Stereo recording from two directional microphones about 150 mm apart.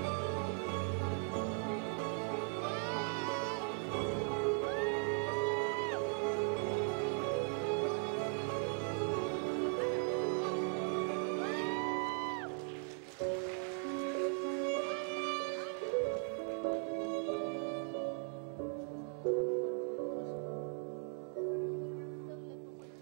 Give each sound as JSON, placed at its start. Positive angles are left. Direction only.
{"t": 0.0, "sound": "music", "side_deg": 5}